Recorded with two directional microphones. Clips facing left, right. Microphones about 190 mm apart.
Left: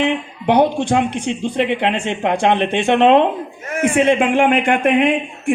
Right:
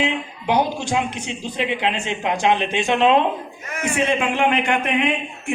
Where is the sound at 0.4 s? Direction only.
60° left (ahead or behind).